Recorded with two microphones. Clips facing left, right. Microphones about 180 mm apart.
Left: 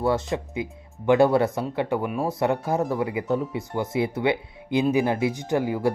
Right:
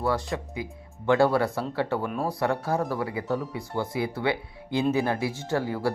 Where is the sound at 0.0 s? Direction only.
20° left (ahead or behind).